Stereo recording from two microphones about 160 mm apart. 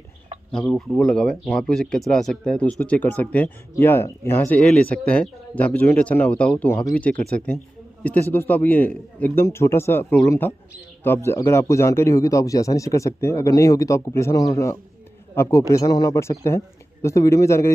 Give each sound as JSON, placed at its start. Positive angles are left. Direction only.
{"t": 0.5, "sound": "speech", "side_deg": 5}